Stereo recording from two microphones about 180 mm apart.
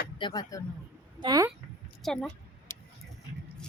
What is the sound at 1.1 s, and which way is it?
Speech, 20° right (ahead or behind).